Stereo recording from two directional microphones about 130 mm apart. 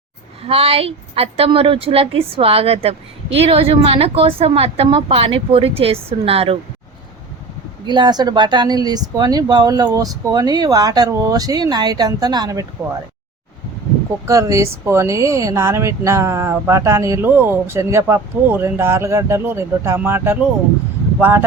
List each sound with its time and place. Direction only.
0.4 s a woman's voice: 50° right (ahead or behind)
7.9 s speech: 35° right (ahead or behind)
14.3 s speech: 25° right (ahead or behind)